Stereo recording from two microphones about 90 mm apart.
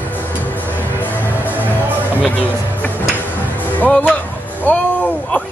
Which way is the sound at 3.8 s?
15° left (ahead or behind).